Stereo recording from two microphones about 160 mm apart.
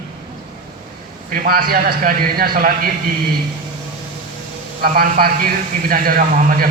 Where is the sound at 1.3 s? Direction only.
65° right (ahead or behind).